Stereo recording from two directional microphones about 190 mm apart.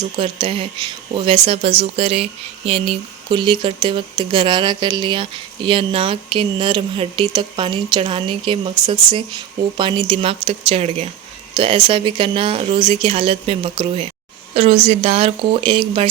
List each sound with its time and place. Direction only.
0.2 s a woman's voice: 30° right (ahead or behind)